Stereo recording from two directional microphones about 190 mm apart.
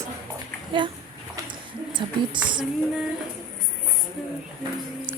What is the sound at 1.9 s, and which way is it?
Speech, 25° right (ahead or behind).